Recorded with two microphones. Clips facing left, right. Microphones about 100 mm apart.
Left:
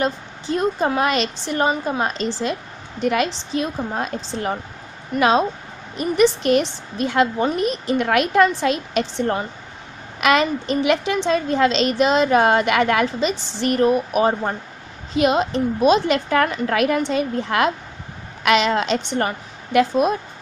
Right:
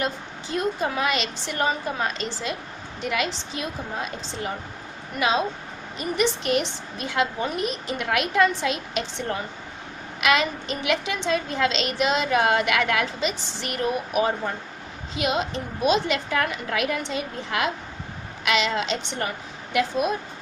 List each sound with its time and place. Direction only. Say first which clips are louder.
0.0 s a woman's voice: left 5 dB; 35° left (ahead or behind)